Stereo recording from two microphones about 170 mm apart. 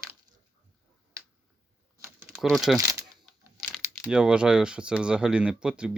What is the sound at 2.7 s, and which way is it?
Speech, 15° right (ahead or behind).